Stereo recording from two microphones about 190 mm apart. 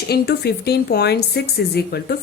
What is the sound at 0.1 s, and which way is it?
Speech, 60° left (ahead or behind).